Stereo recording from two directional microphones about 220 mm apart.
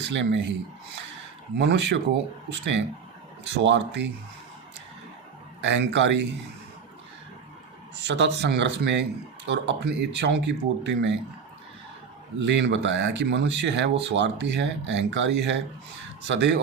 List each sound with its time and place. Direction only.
0.0 s speech: 55° right (ahead or behind)
1.5 s speech: 50° right (ahead or behind)
5.6 s speech: 55° right (ahead or behind)
7.9 s speech: 50° right (ahead or behind)
12.4 s speech: 55° right (ahead or behind)